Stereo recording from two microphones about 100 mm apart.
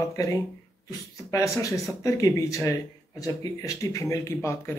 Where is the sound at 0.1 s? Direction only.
35° left (ahead or behind).